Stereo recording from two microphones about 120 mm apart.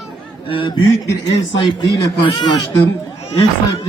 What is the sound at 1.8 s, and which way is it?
Speech, 30° left (ahead or behind).